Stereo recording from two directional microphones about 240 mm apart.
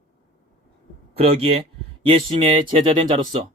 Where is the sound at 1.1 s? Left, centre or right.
Right.